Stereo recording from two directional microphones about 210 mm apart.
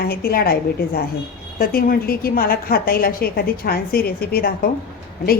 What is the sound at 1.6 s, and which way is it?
A woman's voice, 45° left (ahead or behind).